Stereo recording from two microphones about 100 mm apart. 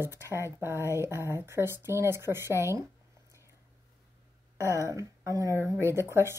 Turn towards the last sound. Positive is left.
turn(degrees=-25)  # may be behind; listen again after turning